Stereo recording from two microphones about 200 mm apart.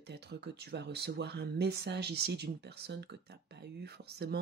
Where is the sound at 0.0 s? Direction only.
55° right (ahead or behind).